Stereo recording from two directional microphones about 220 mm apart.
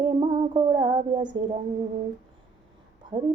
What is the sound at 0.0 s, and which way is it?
Music, 25° right (ahead or behind).